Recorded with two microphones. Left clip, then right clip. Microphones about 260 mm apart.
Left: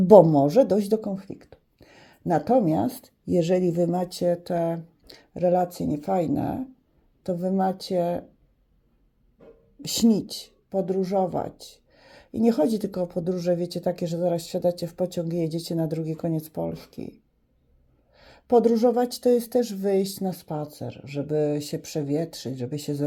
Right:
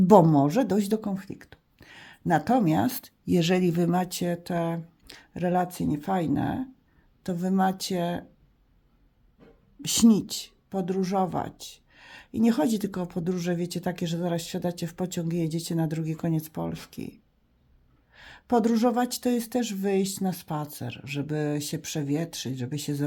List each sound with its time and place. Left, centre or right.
0.5 s speech: centre
9.8 s speech: centre